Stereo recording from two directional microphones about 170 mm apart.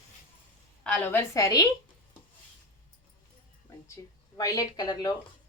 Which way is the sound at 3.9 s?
20° left (ahead or behind).